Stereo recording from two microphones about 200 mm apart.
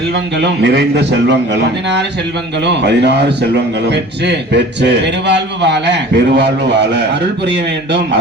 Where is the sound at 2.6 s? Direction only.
60° right (ahead or behind).